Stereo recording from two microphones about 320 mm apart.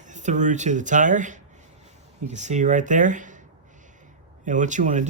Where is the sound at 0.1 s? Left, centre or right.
Right.